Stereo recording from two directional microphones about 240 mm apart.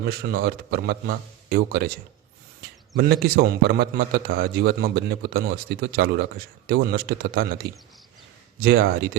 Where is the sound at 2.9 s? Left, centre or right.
Right.